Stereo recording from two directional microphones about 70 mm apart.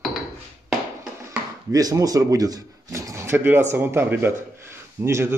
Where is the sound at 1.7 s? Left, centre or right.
Right.